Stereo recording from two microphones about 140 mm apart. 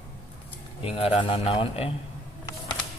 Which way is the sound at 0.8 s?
40° left (ahead or behind).